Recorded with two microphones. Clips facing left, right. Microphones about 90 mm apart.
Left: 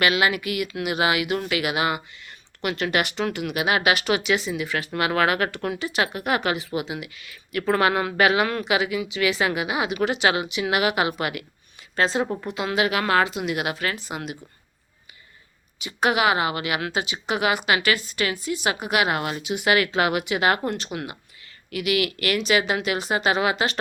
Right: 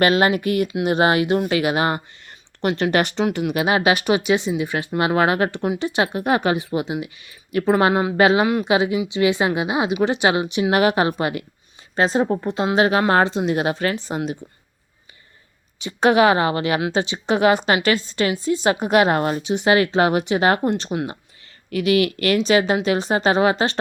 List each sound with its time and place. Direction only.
0.0 s a woman's voice: 35° right (ahead or behind)
15.8 s a woman's voice: 35° right (ahead or behind)